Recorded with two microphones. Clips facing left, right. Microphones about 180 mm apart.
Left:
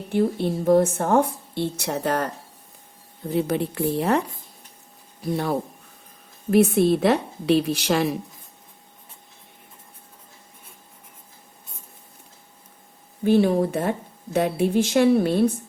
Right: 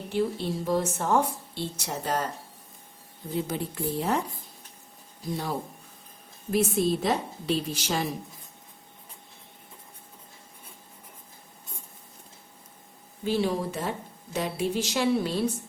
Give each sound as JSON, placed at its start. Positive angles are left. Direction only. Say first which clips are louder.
{"t": 0.1, "sound": "a woman's voice", "louder": "left 6 dB", "side_deg": 55}
{"t": 5.2, "sound": "a woman's voice", "louder": "left 7 dB", "side_deg": 65}
{"t": 13.2, "sound": "a woman's voice", "louder": "left 8 dB", "side_deg": 55}